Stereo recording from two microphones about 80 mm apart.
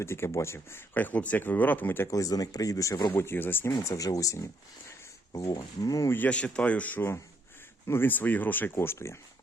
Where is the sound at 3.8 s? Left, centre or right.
Left.